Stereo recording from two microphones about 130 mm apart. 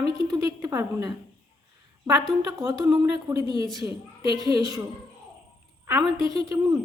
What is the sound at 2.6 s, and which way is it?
Speech, 25° right (ahead or behind).